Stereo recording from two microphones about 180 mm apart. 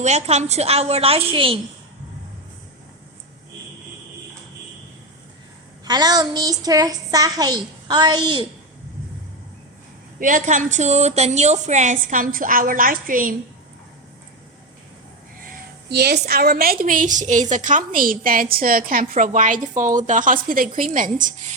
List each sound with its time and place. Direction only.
0.0 s a woman's voice: 35° right (ahead or behind)
5.8 s a woman's voice: 20° right (ahead or behind)
10.2 s a woman's voice: 45° right (ahead or behind)
15.9 s a woman's voice: 65° right (ahead or behind); by 21.5 s 45° right (ahead or behind)